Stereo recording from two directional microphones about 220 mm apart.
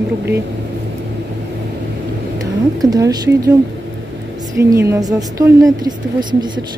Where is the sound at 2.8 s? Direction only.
15° right (ahead or behind).